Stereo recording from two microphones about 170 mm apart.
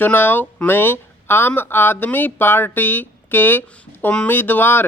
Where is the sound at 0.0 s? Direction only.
10° left (ahead or behind).